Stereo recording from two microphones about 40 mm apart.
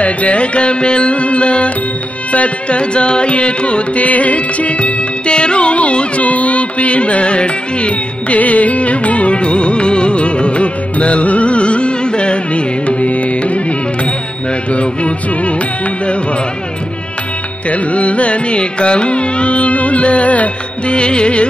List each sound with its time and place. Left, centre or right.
0.0 s music: left
2.3 s carnatic music: left
17.6 s carnatic music: left
20.9 s music: left